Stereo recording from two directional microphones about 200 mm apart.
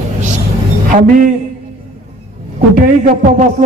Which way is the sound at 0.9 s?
40° right (ahead or behind).